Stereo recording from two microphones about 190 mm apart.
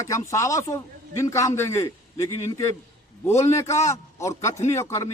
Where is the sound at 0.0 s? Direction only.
15° left (ahead or behind).